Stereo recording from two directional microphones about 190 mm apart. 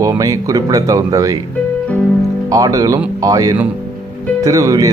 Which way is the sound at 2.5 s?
15° right (ahead or behind).